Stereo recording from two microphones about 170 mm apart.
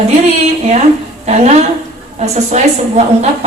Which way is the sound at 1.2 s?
40° right (ahead or behind).